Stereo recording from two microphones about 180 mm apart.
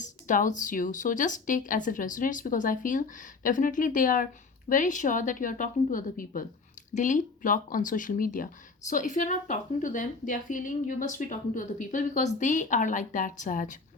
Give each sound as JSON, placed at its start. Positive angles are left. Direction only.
{"t": 0.0, "sound": "speech", "side_deg": 45}